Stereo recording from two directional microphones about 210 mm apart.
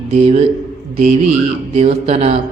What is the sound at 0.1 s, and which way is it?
A man's voice, 30° right (ahead or behind).